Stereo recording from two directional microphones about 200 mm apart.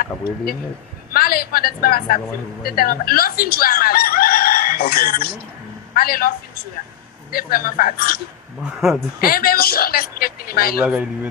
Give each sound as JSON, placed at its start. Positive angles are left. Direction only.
{"t": 1.1, "sound": "a woman's voice", "side_deg": 50}
{"t": 8.6, "sound": "speech", "side_deg": 0}
{"t": 9.2, "sound": "a woman's voice", "side_deg": 45}
{"t": 10.8, "sound": "a man's voice", "side_deg": -5}